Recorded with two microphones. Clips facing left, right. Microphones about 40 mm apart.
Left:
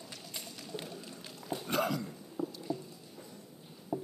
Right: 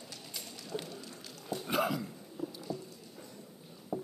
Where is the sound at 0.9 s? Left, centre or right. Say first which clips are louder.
Left 1 dB; centre.